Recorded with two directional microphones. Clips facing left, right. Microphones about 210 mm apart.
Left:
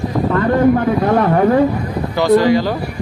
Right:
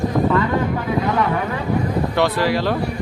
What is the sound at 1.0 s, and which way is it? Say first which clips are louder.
Speech: left 7 dB; 50° left (ahead or behind).